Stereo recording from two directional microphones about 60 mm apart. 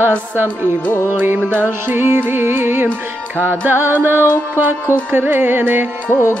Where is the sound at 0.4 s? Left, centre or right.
Right.